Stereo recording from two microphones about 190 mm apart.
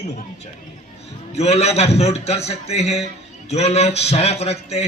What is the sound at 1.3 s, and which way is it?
A man's voice, 35° left (ahead or behind).